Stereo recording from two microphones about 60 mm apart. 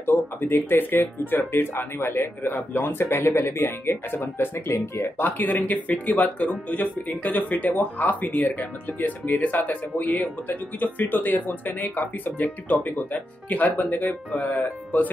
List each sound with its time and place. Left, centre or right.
0.0 s speech: left
4.6 s speech: left
5.2 s speech: left